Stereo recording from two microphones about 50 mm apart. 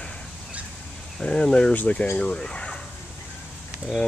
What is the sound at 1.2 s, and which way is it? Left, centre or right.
Speech, centre.